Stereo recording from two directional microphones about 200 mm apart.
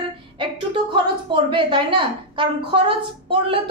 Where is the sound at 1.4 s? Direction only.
25° right (ahead or behind).